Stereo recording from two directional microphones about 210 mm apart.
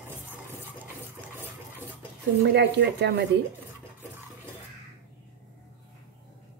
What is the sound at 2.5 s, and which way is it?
Speech, 50° right (ahead or behind).